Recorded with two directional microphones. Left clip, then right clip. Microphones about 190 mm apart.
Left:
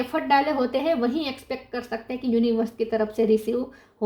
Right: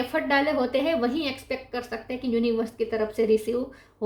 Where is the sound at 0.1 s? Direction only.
30° left (ahead or behind).